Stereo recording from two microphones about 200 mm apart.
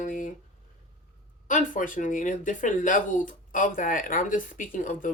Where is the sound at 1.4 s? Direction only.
40° left (ahead or behind).